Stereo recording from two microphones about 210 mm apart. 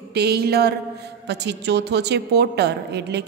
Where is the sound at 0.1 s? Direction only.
50° right (ahead or behind).